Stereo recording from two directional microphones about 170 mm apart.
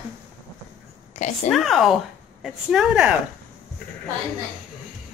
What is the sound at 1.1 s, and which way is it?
Speech, 45° left (ahead or behind).